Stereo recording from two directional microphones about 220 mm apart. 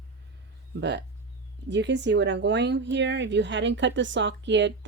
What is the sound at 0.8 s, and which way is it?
Speech, 50° right (ahead or behind).